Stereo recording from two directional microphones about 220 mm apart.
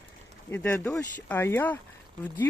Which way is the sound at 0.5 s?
10° left (ahead or behind).